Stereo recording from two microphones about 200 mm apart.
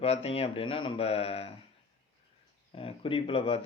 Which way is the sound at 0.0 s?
30° left (ahead or behind).